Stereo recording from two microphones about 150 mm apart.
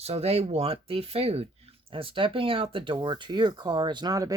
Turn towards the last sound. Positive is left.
turn(degrees=-25)  # may be behind; listen again after turning